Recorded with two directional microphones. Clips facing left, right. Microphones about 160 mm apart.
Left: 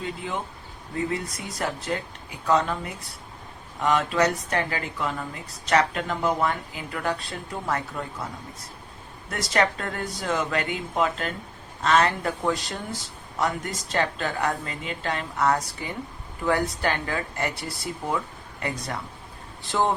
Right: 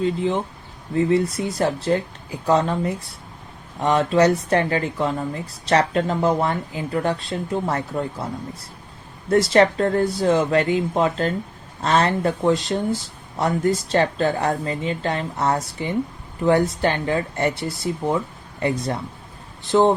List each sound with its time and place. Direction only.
0.9 s speech: 30° right (ahead or behind)
9.3 s speech: 30° right (ahead or behind)
19.6 s speech: 20° right (ahead or behind)